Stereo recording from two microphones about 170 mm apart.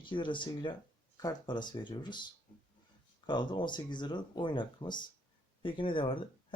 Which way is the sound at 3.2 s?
25° left (ahead or behind).